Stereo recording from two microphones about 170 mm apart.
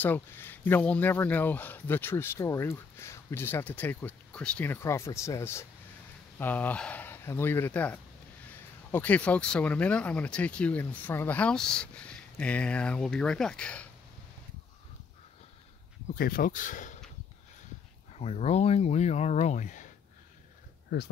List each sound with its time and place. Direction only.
0.0 s speech: 10° left (ahead or behind)
16.2 s speech: 55° left (ahead or behind)
18.1 s speech: 40° left (ahead or behind)